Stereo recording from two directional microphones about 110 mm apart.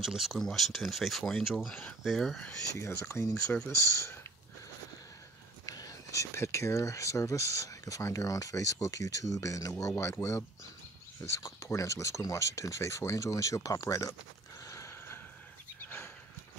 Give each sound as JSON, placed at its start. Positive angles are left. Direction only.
{"t": 0.0, "sound": "speech", "side_deg": 0}
{"t": 2.9, "sound": "speech", "side_deg": 20}
{"t": 5.7, "sound": "speech", "side_deg": 35}
{"t": 14.6, "sound": "horse", "side_deg": 30}
{"t": 15.8, "sound": "a sound", "side_deg": 20}